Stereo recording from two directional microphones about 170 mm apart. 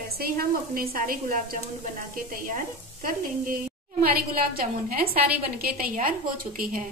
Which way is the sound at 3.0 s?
55° right (ahead or behind).